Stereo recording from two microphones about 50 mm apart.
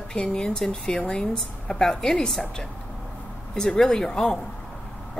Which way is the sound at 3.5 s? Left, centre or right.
Centre.